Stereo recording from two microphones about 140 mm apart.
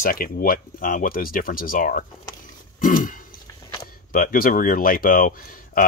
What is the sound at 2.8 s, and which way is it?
Throat clearing, 75° left (ahead or behind).